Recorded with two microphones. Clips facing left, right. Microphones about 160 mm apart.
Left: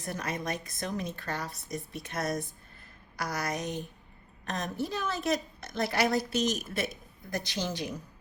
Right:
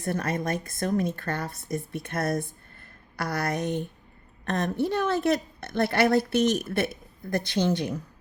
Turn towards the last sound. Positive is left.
turn(degrees=-60)  # may be behind; listen again after turning